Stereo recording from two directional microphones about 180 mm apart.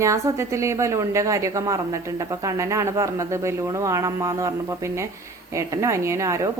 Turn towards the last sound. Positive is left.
turn(degrees=-15)  # may be behind; listen again after turning